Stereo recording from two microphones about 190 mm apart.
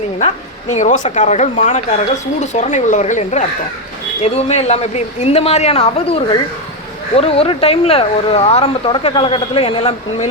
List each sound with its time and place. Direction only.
0.7 s speech: 40° left (ahead or behind)